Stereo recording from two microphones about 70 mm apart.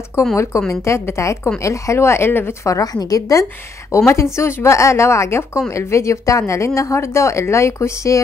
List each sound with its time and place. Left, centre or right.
0.2 s a woman's voice: left
2.7 s a woman's voice: left